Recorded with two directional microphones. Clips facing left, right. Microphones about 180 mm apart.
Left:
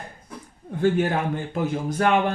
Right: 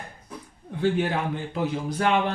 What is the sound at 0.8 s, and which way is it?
A man's voice, 45° left (ahead or behind).